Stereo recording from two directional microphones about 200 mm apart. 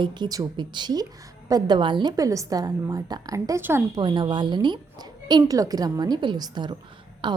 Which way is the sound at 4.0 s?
25° right (ahead or behind).